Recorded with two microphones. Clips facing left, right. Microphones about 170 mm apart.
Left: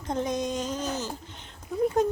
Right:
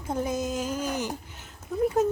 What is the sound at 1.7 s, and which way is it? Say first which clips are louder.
Speech: even; centre (ahead or behind).